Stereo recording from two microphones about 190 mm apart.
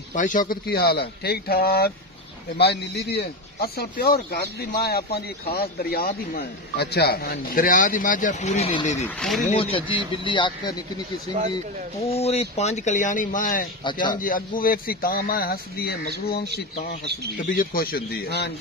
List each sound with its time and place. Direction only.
0.1 s speech: 40° left (ahead or behind)
9.0 s speech: 5° left (ahead or behind)
9.5 s a man's voice: 30° left (ahead or behind)
12.1 s speech: 35° left (ahead or behind)
13.8 s a man's voice: 25° left (ahead or behind)
14.1 s speech: 45° left (ahead or behind)
17.4 s speech: 50° left (ahead or behind)